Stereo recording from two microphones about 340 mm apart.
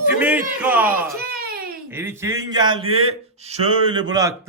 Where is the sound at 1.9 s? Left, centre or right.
Centre.